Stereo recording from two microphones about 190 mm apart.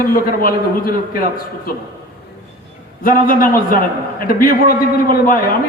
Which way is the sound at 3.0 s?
45° left (ahead or behind).